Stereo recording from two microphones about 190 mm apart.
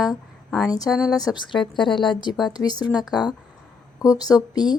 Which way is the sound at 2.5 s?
20° left (ahead or behind).